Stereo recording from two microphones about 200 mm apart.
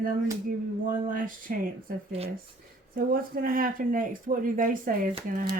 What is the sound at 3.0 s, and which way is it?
Speech, 45° right (ahead or behind).